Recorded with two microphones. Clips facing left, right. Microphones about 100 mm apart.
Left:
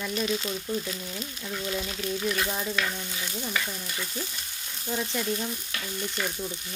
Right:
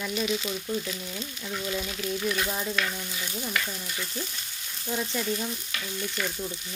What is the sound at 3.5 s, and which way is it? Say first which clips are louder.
Stir: right 1 dB; 5° left (ahead or behind).